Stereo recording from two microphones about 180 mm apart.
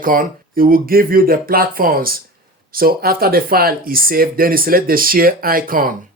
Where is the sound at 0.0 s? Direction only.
50° right (ahead or behind).